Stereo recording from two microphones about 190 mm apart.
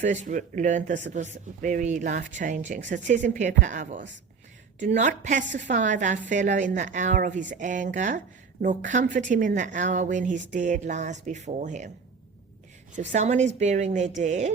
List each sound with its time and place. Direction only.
0.0 s a woman's voice: 40° right (ahead or behind)
13.0 s a woman's voice: 35° right (ahead or behind)